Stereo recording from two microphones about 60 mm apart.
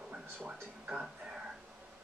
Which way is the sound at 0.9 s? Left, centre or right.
Centre.